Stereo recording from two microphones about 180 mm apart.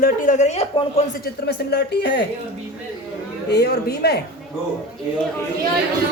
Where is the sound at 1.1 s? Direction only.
60° left (ahead or behind).